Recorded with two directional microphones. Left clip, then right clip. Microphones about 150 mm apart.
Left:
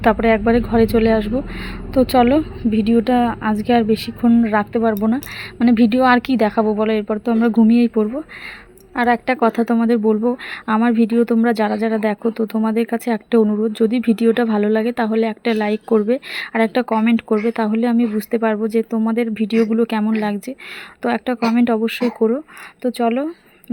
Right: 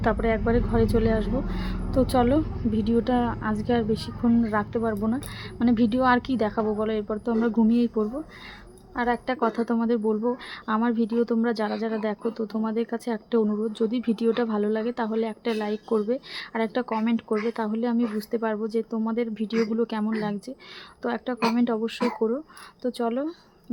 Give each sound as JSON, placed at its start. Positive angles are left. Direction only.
{"t": 0.0, "sound": "a woman's voice", "side_deg": 35}